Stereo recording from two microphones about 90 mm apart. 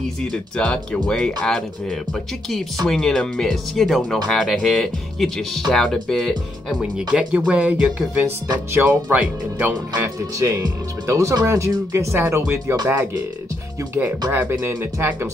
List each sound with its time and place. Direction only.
0.6 s speech: 10° left (ahead or behind); by 10.0 s 20° right (ahead or behind)
10.0 s speech: 30° right (ahead or behind)
14.3 s speech: 20° right (ahead or behind)
14.6 s speech: 30° right (ahead or behind)